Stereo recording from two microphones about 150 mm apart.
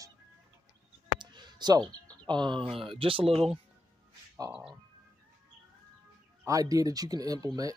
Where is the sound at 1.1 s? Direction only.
30° right (ahead or behind).